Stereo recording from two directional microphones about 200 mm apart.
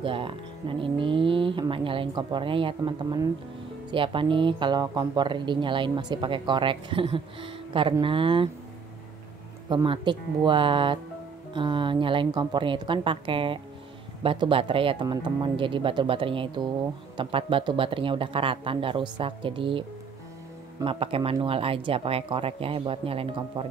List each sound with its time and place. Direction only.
0.0 s speech: 25° right (ahead or behind)
9.7 s speech: 25° right (ahead or behind)
20.8 s speech: 25° right (ahead or behind)